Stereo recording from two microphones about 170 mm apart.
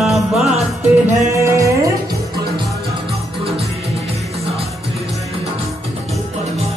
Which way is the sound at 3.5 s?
35° right (ahead or behind).